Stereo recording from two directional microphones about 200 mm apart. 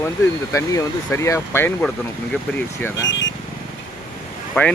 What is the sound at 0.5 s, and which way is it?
Speech, 15° left (ahead or behind).